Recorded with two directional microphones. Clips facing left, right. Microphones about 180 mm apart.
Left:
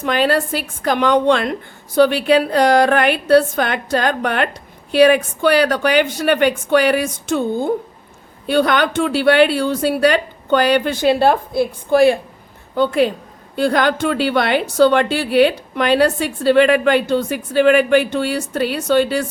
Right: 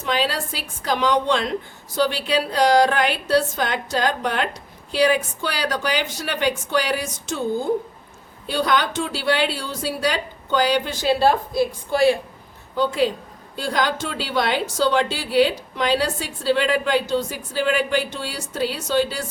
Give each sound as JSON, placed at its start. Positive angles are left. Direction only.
{"t": 0.0, "sound": "a woman's voice", "side_deg": 55}